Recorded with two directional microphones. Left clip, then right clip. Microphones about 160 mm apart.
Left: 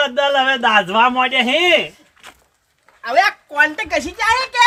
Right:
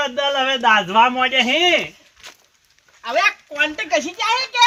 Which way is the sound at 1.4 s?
90° left.